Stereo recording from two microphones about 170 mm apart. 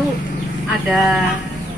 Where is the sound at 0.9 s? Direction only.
5° right (ahead or behind).